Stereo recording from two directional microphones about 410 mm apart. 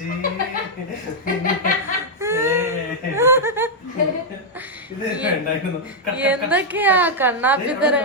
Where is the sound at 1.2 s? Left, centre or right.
Centre.